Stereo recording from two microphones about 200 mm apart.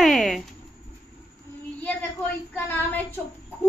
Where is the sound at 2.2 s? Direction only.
10° left (ahead or behind).